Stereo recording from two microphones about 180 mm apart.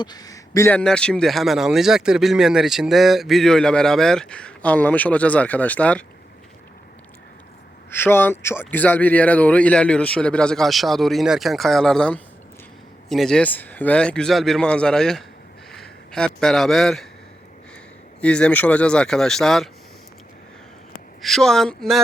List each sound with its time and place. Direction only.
0.0 s a man's voice: 20° left (ahead or behind)
7.9 s a man's voice: 10° left (ahead or behind)
18.2 s a man's voice: 5° left (ahead or behind)
21.2 s a man's voice: centre (ahead or behind)